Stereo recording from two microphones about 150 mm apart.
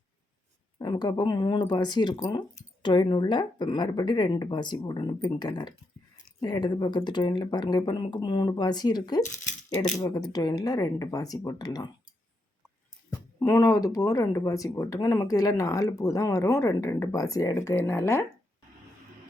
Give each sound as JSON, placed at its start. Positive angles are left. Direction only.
{"t": 0.8, "sound": "speech", "side_deg": 30}
{"t": 13.1, "sound": "speech", "side_deg": 25}